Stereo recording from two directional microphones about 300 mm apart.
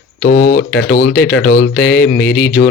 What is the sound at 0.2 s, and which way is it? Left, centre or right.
Speech, left.